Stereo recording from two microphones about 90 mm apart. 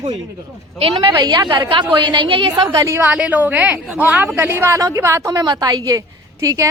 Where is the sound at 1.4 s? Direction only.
50° right (ahead or behind); by 2.5 s 70° right (ahead or behind).